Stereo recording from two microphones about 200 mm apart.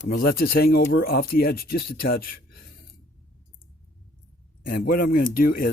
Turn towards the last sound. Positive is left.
turn(degrees=45)  # may be behind; listen again after turning